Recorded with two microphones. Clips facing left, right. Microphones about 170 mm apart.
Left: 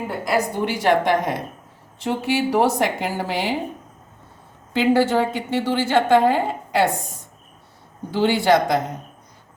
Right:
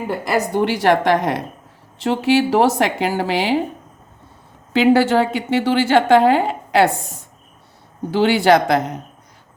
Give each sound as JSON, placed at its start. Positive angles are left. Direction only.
{"t": 0.3, "sound": "a woman's voice", "side_deg": -80}
{"t": 4.7, "sound": "a woman's voice", "side_deg": -80}
{"t": 8.1, "sound": "a woman's voice", "side_deg": -80}